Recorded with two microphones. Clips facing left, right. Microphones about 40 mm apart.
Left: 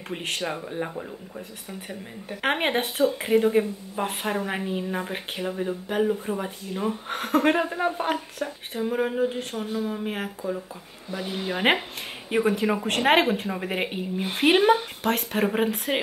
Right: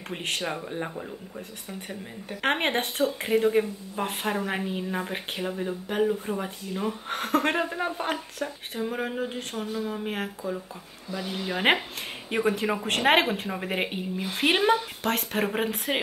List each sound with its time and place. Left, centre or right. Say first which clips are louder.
0.1 s speech: left 1 dB; centre
11.1 s speech: left 2 dB; left
11.5 s speech: left 1 dB; centre